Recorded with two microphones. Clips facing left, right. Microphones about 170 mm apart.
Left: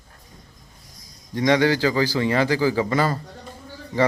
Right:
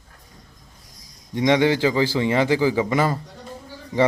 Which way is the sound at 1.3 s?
20° right (ahead or behind).